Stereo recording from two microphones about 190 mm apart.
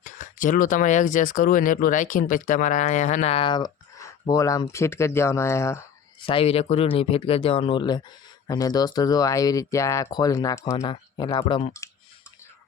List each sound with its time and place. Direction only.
0.0 s speech: 45° left (ahead or behind); by 5.8 s 15° left (ahead or behind)
6.2 s speech: 30° left (ahead or behind)
11.8 s a sound: 15° left (ahead or behind)